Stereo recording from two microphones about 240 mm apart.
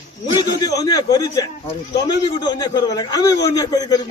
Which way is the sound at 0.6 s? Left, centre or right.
Centre.